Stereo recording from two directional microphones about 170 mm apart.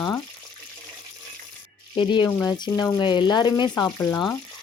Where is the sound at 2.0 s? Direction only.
25° left (ahead or behind).